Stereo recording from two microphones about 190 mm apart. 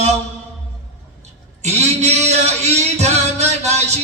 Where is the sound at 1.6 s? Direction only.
35° right (ahead or behind).